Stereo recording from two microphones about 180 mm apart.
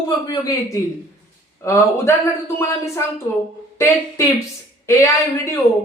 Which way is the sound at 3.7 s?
15° left (ahead or behind).